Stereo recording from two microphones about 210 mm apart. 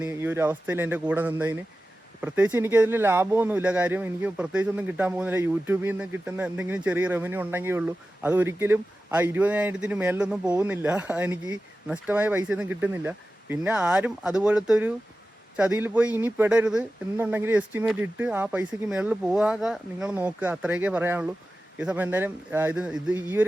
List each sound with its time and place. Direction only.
0.0 s speech: 10° right (ahead or behind)